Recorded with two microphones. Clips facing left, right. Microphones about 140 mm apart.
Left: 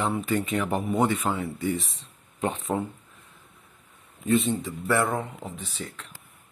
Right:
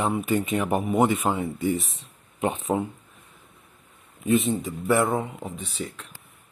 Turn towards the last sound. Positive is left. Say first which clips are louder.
# right 3 dB
turn(degrees=-10)  # may be behind; listen again after turning